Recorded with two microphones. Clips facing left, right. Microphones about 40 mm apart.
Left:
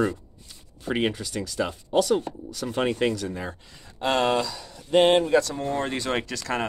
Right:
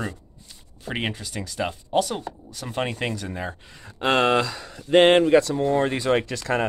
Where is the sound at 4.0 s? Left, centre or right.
Right.